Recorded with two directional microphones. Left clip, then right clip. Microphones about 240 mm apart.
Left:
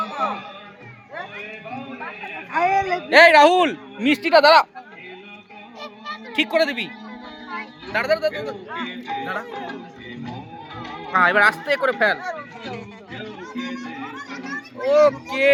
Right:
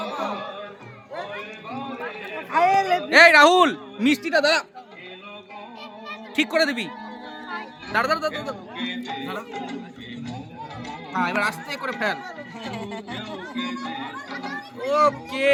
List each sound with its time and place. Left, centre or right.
2.3 s a sound: centre
3.1 s speech: centre
4.4 s speech: left
6.3 s speech: centre
10.8 s speech: centre
14.3 s a sound: centre